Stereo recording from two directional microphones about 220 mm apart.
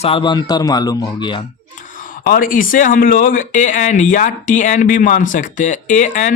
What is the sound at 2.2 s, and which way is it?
Speech, 40° left (ahead or behind).